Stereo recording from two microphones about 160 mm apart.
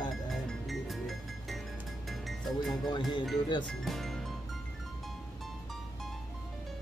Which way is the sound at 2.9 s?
25° left (ahead or behind).